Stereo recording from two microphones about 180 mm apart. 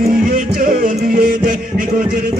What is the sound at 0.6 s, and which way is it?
Music, 50° right (ahead or behind).